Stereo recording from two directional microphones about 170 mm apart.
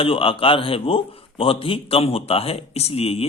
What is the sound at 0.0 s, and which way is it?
A man's voice, 35° left (ahead or behind).